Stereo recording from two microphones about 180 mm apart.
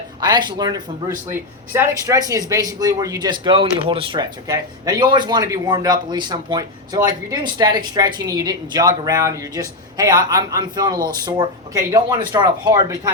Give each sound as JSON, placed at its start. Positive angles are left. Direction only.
{"t": 0.2, "sound": "speech", "side_deg": -25}